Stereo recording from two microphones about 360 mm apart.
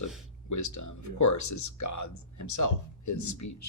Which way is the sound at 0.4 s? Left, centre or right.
Left.